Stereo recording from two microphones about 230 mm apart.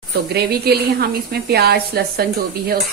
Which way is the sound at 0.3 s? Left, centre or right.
Right.